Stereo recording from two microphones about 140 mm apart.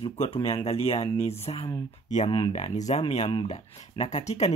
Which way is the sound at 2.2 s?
35° left (ahead or behind).